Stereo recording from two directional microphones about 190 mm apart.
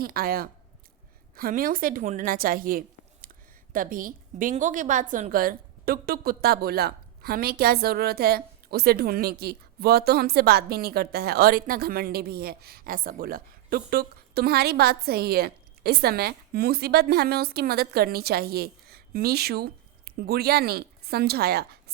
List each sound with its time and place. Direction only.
0.0 s a woman's voice: 50° right (ahead or behind)